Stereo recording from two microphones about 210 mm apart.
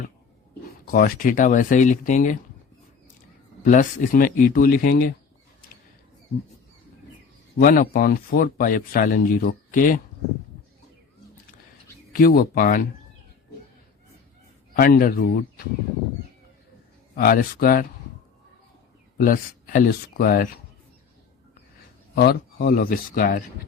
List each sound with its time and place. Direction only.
0.9 s speech: 45° left (ahead or behind)
3.6 s speech: 40° left (ahead or behind)
7.6 s speech: 45° left (ahead or behind)
12.1 s speech: 45° left (ahead or behind)
14.8 s speech: 45° left (ahead or behind)
17.2 s speech: 45° left (ahead or behind)
19.2 s speech: 40° left (ahead or behind)
22.1 s speech: 50° left (ahead or behind)